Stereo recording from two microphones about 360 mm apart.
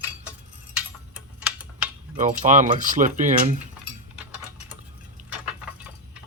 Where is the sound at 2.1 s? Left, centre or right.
Centre.